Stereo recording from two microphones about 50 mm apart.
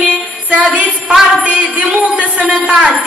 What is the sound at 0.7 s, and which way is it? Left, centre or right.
Jingle bell, right.